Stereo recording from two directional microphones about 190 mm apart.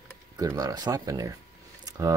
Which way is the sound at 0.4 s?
20° right (ahead or behind).